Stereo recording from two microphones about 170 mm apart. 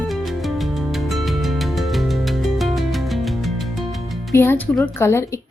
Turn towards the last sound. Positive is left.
turn(degrees=15)  # may be behind; listen again after turning